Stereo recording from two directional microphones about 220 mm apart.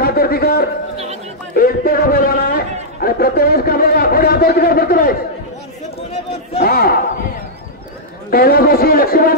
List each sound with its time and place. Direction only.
0.0 s a sound: 45° left (ahead or behind)
1.5 s a man's voice: 40° left (ahead or behind)
6.6 s speech: 45° left (ahead or behind)
8.3 s a man's voice: 40° left (ahead or behind)